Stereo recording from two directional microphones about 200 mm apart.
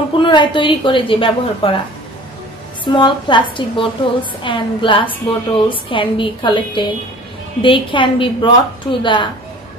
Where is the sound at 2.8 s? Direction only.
25° left (ahead or behind).